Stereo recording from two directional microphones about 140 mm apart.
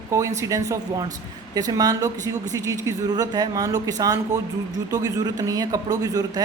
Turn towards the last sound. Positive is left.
turn(degrees=-25)  # may be behind; listen again after turning